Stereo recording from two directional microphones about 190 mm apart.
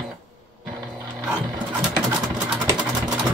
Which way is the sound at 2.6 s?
5° right (ahead or behind).